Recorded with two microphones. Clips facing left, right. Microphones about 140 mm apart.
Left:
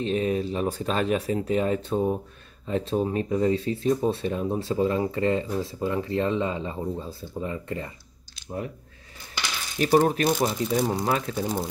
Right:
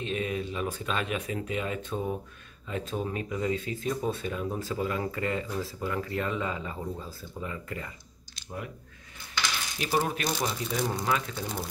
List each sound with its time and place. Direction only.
0.0 s speech: 35° left (ahead or behind)
9.8 s speech: 45° left (ahead or behind)